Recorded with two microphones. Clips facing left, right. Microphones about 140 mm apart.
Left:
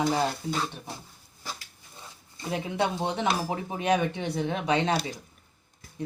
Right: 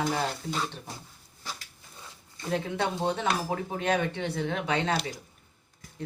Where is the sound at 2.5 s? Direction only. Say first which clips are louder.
Left 1 dB; 15° left (ahead or behind).